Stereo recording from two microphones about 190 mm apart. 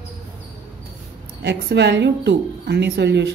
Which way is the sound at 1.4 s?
65° right (ahead or behind).